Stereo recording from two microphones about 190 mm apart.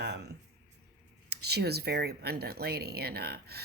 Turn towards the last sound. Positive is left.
turn(degrees=-55)  # may be behind; listen again after turning